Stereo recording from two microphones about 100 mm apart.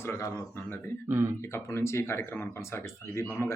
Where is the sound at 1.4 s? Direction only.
25° left (ahead or behind).